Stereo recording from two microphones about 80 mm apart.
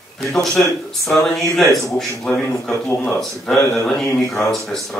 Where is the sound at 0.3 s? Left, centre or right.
Centre.